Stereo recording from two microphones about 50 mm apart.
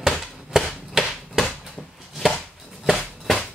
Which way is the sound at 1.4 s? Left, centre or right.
Centre.